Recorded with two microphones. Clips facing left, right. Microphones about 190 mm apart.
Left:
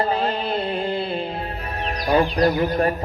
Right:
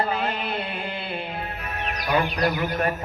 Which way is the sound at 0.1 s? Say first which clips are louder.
Left 4 dB; 30° left (ahead or behind).